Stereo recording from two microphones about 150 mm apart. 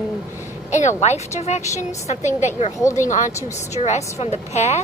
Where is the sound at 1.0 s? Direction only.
50° left (ahead or behind).